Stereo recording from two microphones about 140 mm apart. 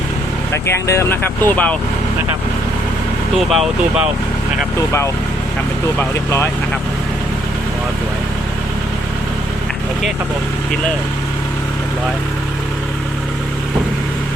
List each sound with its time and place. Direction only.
0.5 s speech: 20° left (ahead or behind)
3.3 s speech: centre (ahead or behind)
6.0 s speech: 20° left (ahead or behind)